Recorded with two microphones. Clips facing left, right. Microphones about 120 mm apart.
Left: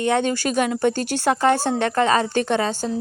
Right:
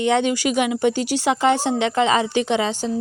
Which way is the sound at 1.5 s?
45° left (ahead or behind).